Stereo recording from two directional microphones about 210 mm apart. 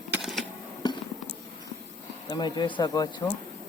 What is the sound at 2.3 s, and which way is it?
Speech, 20° left (ahead or behind).